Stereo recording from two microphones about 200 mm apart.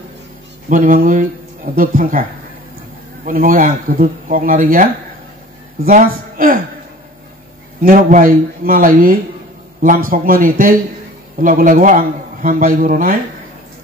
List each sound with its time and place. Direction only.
0.7 s a man's voice: 40° right (ahead or behind)
3.3 s a man's voice: 45° right (ahead or behind)
5.9 s a man's voice: 45° right (ahead or behind)
7.8 s a man's voice: 45° right (ahead or behind)